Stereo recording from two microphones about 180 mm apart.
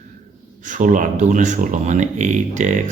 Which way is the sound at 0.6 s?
45° right (ahead or behind).